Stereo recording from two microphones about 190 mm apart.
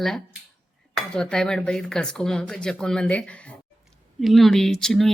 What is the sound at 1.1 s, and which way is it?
Speech, 5° left (ahead or behind).